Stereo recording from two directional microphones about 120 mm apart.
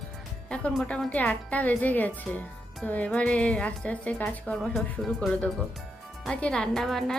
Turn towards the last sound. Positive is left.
turn(degrees=5)  # may be behind; listen again after turning